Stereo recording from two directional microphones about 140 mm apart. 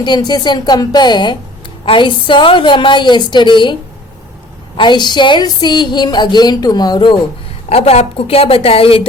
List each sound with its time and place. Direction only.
0.0 s a woman's voice: 30° left (ahead or behind)
4.8 s a woman's voice: 30° left (ahead or behind)
7.7 s a woman's voice: 45° left (ahead or behind)